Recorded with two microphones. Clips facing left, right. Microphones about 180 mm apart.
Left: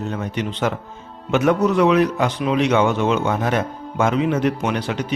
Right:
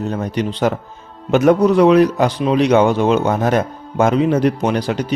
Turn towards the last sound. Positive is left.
turn(degrees=-35)  # may be behind; listen again after turning